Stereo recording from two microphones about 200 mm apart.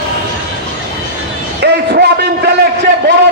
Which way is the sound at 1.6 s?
55° right (ahead or behind).